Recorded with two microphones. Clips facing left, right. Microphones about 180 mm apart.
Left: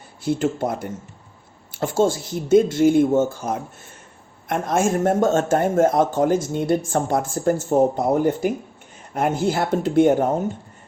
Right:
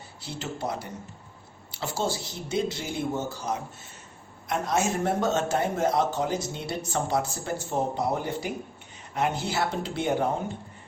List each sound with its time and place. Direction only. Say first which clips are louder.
0.2 s a man's voice: left 12 dB; 50° left (ahead or behind)